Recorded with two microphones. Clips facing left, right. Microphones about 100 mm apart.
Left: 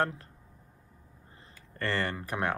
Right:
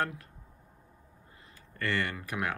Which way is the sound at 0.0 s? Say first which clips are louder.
Left 3 dB; 30° left (ahead or behind).